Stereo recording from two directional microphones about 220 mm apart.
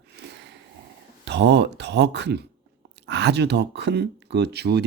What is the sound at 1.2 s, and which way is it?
Speech, 50° right (ahead or behind).